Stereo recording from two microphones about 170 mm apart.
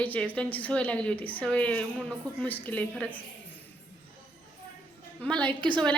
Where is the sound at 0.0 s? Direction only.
10° left (ahead or behind).